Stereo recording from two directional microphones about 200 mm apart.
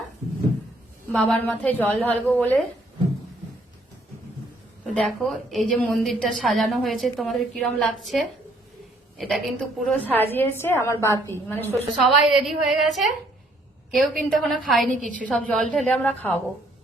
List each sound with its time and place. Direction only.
1.1 s a woman's voice: 5° left (ahead or behind)
4.9 s a woman's voice: centre (ahead or behind)
12.0 s a woman's voice: centre (ahead or behind)